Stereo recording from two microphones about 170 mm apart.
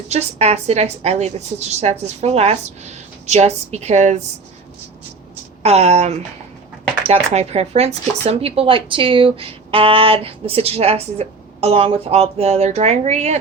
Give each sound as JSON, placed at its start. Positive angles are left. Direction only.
{"t": 0.1, "sound": "speech", "side_deg": -40}
{"t": 5.6, "sound": "speech", "side_deg": -40}